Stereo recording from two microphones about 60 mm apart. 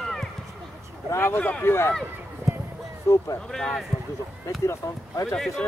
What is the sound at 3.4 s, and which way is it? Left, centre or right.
Speech, centre.